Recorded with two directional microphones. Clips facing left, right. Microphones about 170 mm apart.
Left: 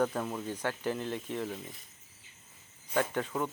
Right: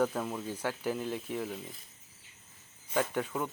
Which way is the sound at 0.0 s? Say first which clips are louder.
Even; centre (ahead or behind).